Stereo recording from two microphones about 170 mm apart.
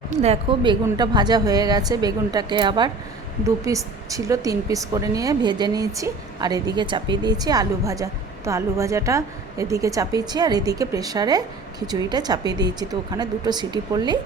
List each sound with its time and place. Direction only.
0.1 s speech: 40° right (ahead or behind)
0.6 s a woman's voice: 25° right (ahead or behind)